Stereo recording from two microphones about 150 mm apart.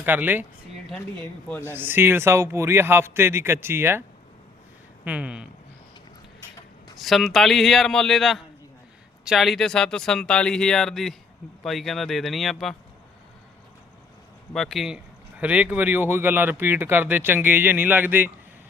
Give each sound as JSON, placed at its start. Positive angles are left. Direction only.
{"t": 0.0, "sound": "speech", "side_deg": -10}
{"t": 1.2, "sound": "speech", "side_deg": 10}
{"t": 1.6, "sound": "speech", "side_deg": -15}
{"t": 5.0, "sound": "speech", "side_deg": -10}
{"t": 7.0, "sound": "speech", "side_deg": 0}
{"t": 14.5, "sound": "speech", "side_deg": 0}